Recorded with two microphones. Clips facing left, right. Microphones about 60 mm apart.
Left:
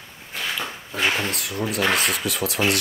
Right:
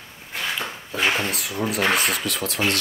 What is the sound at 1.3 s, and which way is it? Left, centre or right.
Speech, centre.